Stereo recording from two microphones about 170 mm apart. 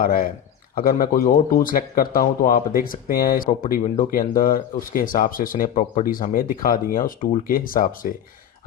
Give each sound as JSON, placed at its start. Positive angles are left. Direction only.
{"t": 0.0, "sound": "a man's voice", "side_deg": 55}